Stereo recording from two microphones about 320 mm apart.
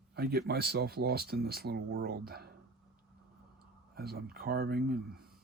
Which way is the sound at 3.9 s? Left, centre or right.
Right.